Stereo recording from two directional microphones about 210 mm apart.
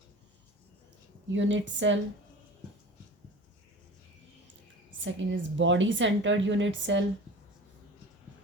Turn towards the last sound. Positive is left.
turn(degrees=-60)  # may be behind; listen again after turning